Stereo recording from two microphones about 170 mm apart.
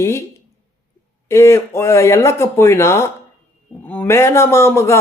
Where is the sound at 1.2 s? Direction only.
20° left (ahead or behind).